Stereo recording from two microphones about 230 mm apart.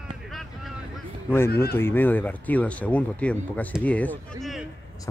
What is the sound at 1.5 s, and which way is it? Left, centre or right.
Speech, left.